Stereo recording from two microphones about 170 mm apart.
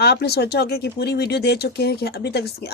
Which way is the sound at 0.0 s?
70° left (ahead or behind).